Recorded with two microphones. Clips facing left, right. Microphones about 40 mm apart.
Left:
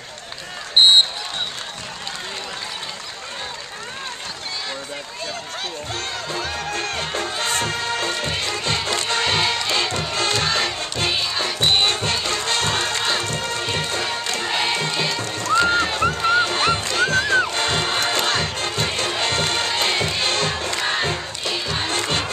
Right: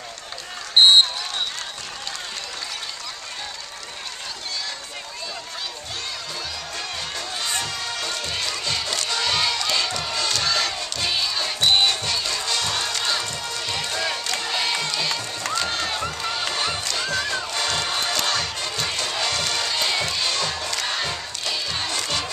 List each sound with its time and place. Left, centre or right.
0.8 s basketball bounce: centre
6.4 s music: left
8.1 s crowd: left
10.1 s music: left
11.8 s music: left
14.4 s crowd: left
15.5 s run: left
16.2 s music: left
18.9 s crowd: left